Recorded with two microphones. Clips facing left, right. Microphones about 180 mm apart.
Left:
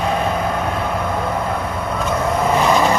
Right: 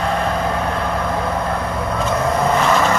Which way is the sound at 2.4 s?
10° left (ahead or behind).